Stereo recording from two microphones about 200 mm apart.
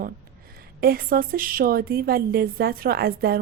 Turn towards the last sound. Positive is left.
turn(degrees=-50)  # may be behind; listen again after turning